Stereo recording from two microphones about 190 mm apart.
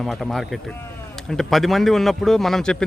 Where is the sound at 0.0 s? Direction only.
Centre (ahead or behind).